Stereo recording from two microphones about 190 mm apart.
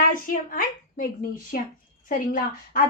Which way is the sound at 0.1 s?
45° left (ahead or behind).